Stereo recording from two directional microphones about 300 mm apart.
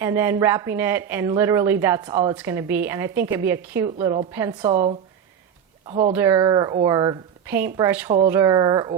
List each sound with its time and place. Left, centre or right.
0.0 s speech: centre